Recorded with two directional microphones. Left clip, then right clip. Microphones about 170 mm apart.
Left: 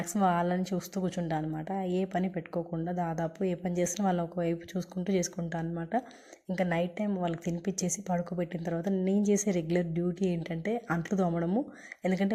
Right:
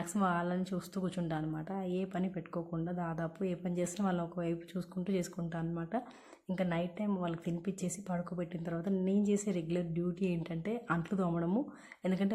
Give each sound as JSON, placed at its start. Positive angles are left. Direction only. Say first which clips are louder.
{"t": 0.0, "sound": "a woman's voice", "louder": "left 6 dB", "side_deg": 15}